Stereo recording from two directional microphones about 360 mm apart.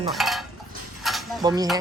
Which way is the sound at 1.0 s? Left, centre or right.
Centre.